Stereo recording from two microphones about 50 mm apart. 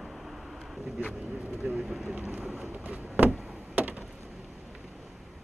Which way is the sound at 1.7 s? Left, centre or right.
Centre.